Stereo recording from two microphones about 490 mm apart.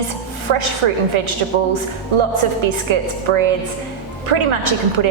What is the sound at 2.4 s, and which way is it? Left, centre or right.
Speech, right.